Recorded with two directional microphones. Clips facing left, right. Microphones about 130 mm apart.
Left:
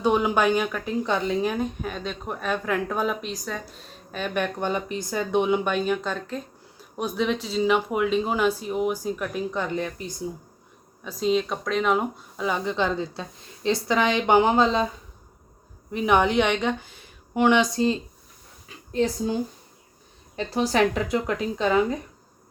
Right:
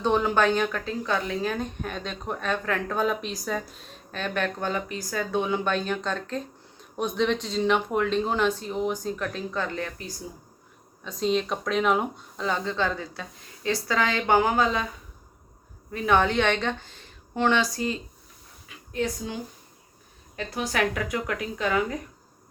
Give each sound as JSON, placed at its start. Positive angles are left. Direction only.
{"t": 0.0, "sound": "a woman's voice", "side_deg": 10}
{"t": 1.0, "sound": "a woman's voice", "side_deg": 20}
{"t": 11.0, "sound": "a woman's voice", "side_deg": 0}
{"t": 15.9, "sound": "speech", "side_deg": 15}